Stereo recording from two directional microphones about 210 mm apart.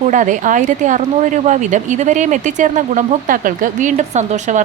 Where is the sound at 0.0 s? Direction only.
35° right (ahead or behind).